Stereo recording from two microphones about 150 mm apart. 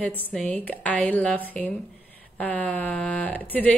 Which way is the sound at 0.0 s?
10° left (ahead or behind).